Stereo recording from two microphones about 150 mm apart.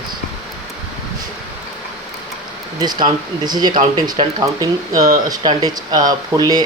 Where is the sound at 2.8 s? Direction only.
30° right (ahead or behind).